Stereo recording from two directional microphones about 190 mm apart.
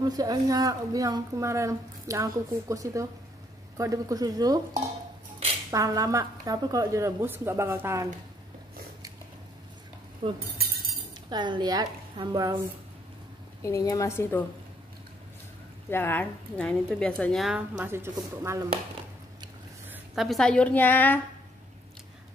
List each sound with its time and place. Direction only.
0.0 s a woman's voice: 20° right (ahead or behind)
5.7 s a woman's voice: 15° right (ahead or behind)
10.2 s a woman's voice: 30° right (ahead or behind)
13.6 s speech: 15° left (ahead or behind)
15.9 s a woman's voice: 10° left (ahead or behind); by 18.7 s 15° right (ahead or behind)
19.9 s a woman's voice: centre (ahead or behind)